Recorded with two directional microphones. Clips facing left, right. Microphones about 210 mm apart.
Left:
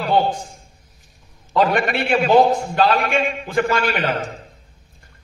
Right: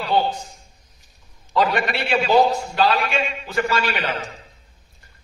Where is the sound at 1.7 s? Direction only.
50° left (ahead or behind).